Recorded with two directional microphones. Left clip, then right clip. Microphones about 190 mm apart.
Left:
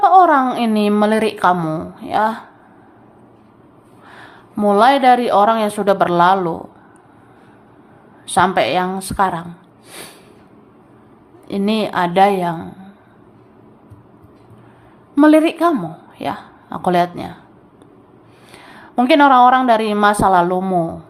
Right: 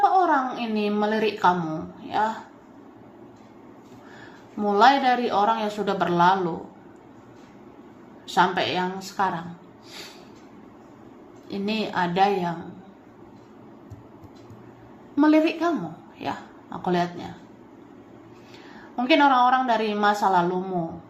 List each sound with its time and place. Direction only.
0.0 s a woman's voice: 35° left (ahead or behind)
4.2 s a woman's voice: 35° left (ahead or behind)
8.3 s a woman's voice: 30° left (ahead or behind)
11.4 s a woman's voice: 30° left (ahead or behind)
15.1 s a woman's voice: 35° left (ahead or behind)
18.7 s a woman's voice: 35° left (ahead or behind)